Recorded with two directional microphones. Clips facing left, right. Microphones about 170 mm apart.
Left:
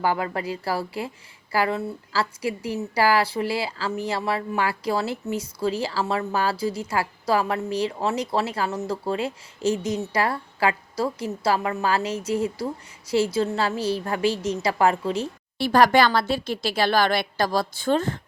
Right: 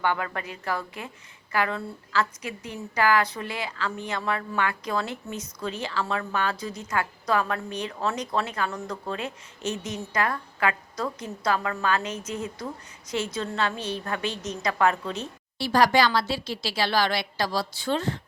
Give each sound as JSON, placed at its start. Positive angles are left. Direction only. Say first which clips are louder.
{"t": 0.0, "sound": "a woman's voice", "louder": "left 3 dB", "side_deg": 30}
{"t": 15.5, "sound": "speech", "louder": "left 3 dB", "side_deg": 55}